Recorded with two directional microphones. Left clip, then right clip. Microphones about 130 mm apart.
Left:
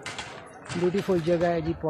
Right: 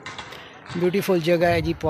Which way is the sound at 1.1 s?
25° right (ahead or behind).